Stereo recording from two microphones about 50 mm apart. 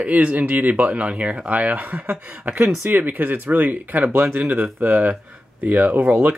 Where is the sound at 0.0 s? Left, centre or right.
Right.